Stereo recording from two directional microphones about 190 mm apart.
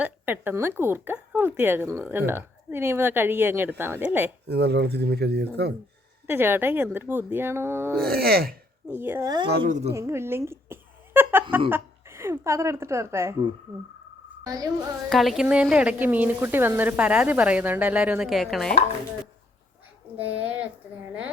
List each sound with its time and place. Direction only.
0.0 s a woman's voice: 10° right (ahead or behind)
4.4 s speech: 60° right (ahead or behind)
6.2 s a woman's voice: 10° right (ahead or behind)
8.0 s speech: 55° right (ahead or behind)
8.9 s a woman's voice: 10° right (ahead or behind)
9.5 s speech: 55° right (ahead or behind)
9.9 s a sound: 15° right (ahead or behind)
11.7 s a woman's voice: 15° right (ahead or behind)
14.4 s a child's voice: 20° right (ahead or behind)
15.1 s a woman's voice: centre (ahead or behind)
20.1 s a woman's voice: 10° right (ahead or behind)